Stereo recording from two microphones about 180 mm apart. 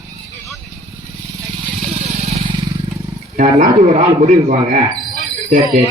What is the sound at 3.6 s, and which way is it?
Speech, 40° right (ahead or behind).